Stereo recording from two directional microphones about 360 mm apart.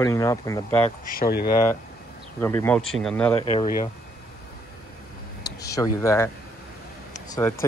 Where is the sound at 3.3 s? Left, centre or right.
Centre.